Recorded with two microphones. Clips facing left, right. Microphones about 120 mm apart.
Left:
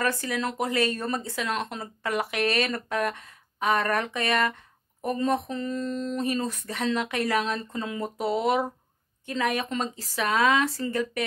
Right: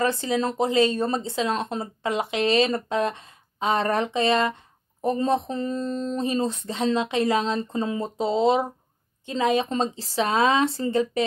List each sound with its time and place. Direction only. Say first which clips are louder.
0.0 s speech: right 4 dB; 25° right (ahead or behind)